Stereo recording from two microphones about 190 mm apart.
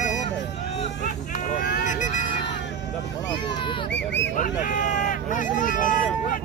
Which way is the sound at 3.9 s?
65° left (ahead or behind).